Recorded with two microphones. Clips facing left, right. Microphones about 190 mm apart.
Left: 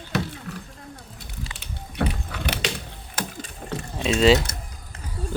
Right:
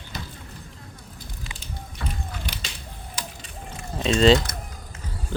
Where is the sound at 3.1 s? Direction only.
55° left (ahead or behind).